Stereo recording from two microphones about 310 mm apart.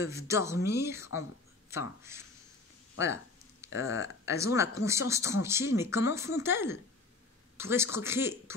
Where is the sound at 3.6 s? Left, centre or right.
Centre.